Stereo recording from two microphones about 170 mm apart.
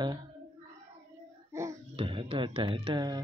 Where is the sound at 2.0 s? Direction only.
30° right (ahead or behind).